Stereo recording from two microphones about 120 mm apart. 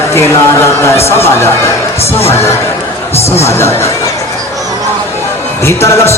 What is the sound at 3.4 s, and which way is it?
Speech, 20° left (ahead or behind).